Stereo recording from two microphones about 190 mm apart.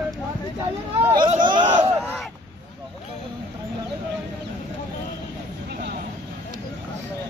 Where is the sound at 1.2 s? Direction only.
25° right (ahead or behind).